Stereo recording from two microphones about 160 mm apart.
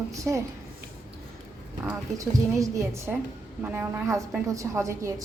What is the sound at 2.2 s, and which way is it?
A woman's voice, 20° right (ahead or behind).